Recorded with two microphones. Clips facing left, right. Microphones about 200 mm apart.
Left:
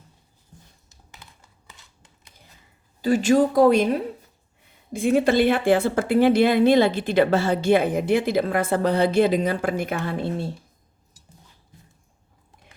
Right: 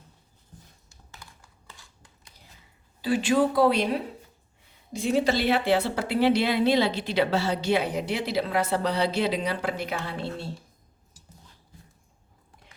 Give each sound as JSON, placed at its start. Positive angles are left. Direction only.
{"t": 0.9, "sound": "computer keyboard", "side_deg": 20}
{"t": 3.0, "sound": "speech", "side_deg": 45}